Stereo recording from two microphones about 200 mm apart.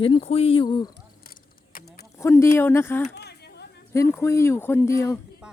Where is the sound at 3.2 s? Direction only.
55° left (ahead or behind).